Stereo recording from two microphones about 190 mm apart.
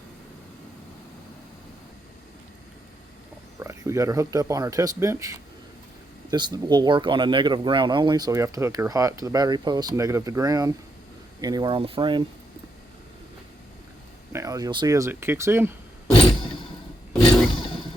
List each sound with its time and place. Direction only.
3.6 s speech: 15° right (ahead or behind)
14.3 s speech: 20° right (ahead or behind)